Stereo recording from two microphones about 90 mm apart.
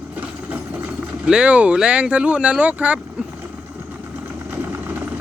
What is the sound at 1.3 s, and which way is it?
Speech, 10° right (ahead or behind).